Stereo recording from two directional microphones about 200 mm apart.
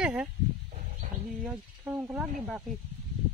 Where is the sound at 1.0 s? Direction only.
35° right (ahead or behind).